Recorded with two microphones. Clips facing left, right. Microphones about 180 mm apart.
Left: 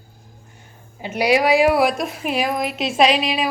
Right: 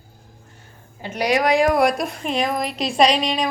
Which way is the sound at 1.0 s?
10° left (ahead or behind).